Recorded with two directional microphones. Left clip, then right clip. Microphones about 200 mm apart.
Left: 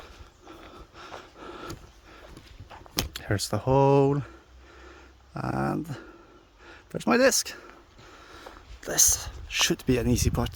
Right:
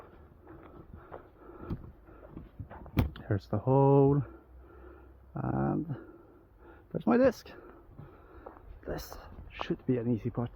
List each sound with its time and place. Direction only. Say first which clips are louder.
0.9 s snort: left 8 dB; 70° left (ahead or behind)
3.1 s speech: left 6 dB; 20° left (ahead or behind)
5.3 s dog: left 4 dB; 20° left (ahead or behind)
6.7 s speech: left 4 dB; 20° left (ahead or behind)
8.5 s a sound: left 1 dB; 5° left (ahead or behind)
8.8 s speech: left 16 dB; 50° left (ahead or behind)
9.5 s speech: left 9 dB; 80° left